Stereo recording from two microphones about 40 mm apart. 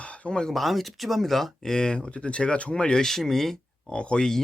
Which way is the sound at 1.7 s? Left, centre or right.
Centre.